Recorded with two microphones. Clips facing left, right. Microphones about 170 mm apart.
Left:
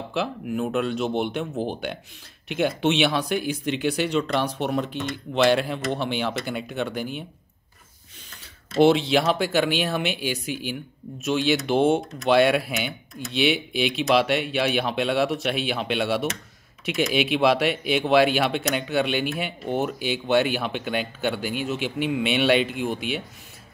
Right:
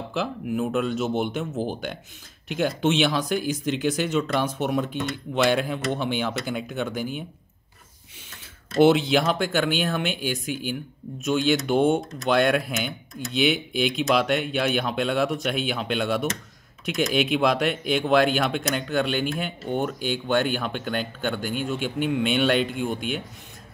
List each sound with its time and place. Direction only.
0.1 s speech: centre (ahead or behind)
8.7 s speech: centre (ahead or behind)